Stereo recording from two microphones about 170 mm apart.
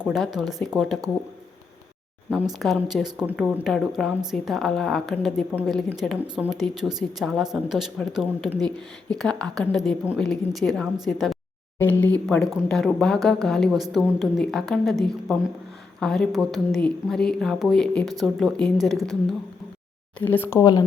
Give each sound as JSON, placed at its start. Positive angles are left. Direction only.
{"t": 0.0, "sound": "speech", "side_deg": 0}
{"t": 2.3, "sound": "speech", "side_deg": 0}
{"t": 11.8, "sound": "speech", "side_deg": 10}
{"t": 20.3, "sound": "speech", "side_deg": 15}